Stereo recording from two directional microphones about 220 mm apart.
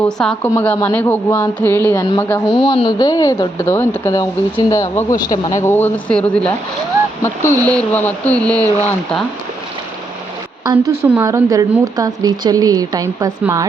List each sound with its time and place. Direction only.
0.2 s speech: centre (ahead or behind)
2.6 s speech: 20° left (ahead or behind); by 6.5 s 5° left (ahead or behind)
7.6 s speech: 5° left (ahead or behind)
10.7 s a woman's voice: 15° right (ahead or behind)